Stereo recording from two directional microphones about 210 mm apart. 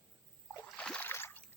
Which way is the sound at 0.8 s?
5° left (ahead or behind).